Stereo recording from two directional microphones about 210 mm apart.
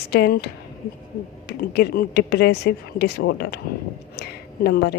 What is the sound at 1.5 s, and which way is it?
Speech, 50° left (ahead or behind).